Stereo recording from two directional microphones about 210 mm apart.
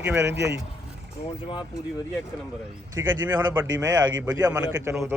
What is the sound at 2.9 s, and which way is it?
Speech, 10° right (ahead or behind).